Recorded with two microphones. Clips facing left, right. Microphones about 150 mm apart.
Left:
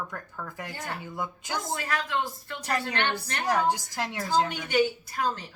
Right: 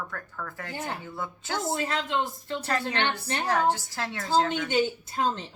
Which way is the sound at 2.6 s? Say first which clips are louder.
Even; 15° left (ahead or behind).